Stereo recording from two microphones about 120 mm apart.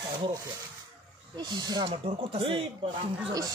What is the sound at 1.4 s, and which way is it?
Speech, 40° right (ahead or behind).